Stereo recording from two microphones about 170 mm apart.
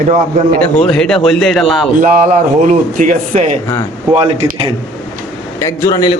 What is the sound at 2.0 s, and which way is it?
Speech, 50° right (ahead or behind).